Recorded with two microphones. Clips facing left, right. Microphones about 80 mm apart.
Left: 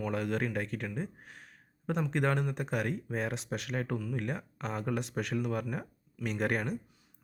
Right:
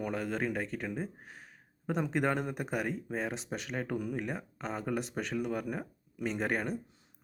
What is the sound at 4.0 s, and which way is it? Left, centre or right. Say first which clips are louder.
Speech: right 2 dB; centre.